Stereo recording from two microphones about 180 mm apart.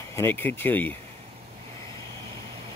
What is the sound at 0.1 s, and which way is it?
Speech, 10° left (ahead or behind).